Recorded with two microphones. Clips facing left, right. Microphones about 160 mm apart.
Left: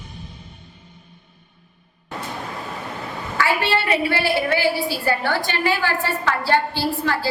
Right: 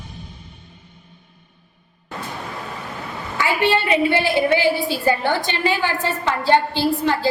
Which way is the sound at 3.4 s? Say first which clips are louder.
Right 2 dB; 20° right (ahead or behind).